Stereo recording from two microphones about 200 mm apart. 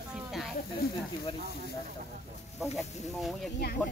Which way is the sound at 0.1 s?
Centre (ahead or behind).